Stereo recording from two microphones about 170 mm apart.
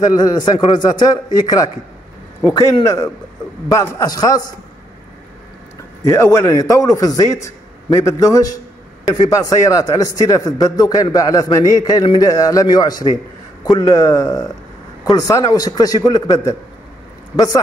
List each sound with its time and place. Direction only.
0.0 s a man's voice: 25° left (ahead or behind)
6.0 s a man's voice: 20° left (ahead or behind)